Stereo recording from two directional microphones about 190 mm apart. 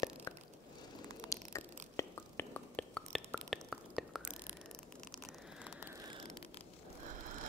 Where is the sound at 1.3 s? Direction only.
15° left (ahead or behind); by 4.3 s centre (ahead or behind).